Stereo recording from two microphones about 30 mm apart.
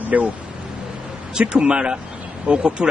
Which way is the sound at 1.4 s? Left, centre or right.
Right.